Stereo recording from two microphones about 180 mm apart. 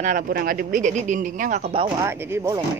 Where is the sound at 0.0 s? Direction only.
50° right (ahead or behind).